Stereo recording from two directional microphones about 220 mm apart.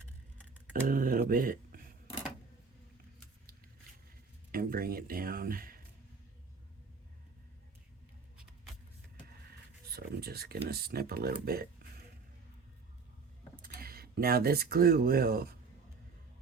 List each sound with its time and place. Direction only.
0.7 s a sound: 40° right (ahead or behind)
4.5 s speech: 40° right (ahead or behind)
9.9 s speech: 45° right (ahead or behind)
13.6 s speech: 40° right (ahead or behind)